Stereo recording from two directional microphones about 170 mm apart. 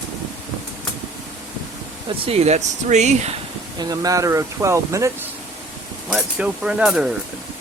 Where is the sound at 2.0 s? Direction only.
35° right (ahead or behind).